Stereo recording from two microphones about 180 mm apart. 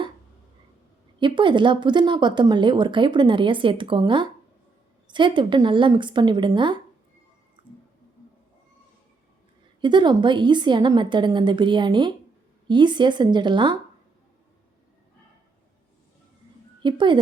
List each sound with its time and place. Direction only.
1.2 s speech: 25° right (ahead or behind)
9.8 s speech: 25° right (ahead or behind)
16.8 s speech: 25° right (ahead or behind)